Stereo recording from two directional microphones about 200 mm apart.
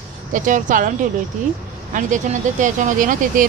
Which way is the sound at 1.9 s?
40° right (ahead or behind).